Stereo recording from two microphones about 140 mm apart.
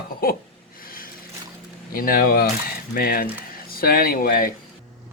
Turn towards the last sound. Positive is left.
turn(degrees=90)